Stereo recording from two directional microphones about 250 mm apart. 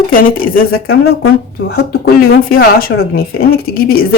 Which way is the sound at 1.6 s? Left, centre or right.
Left.